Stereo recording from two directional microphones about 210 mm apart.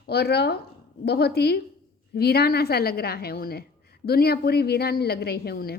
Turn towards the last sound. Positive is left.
turn(degrees=50)  # may be behind; listen again after turning